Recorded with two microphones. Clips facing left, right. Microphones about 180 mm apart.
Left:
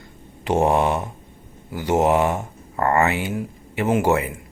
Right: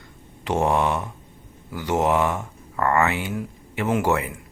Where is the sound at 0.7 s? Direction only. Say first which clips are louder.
Left 2 dB; 20° left (ahead or behind).